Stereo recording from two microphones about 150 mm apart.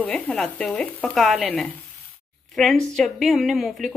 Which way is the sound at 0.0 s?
5° left (ahead or behind).